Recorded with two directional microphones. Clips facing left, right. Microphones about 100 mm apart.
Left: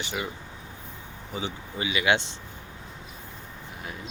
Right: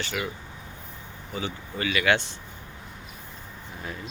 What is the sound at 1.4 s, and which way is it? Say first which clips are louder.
Speech: right 1 dB; 20° left (ahead or behind).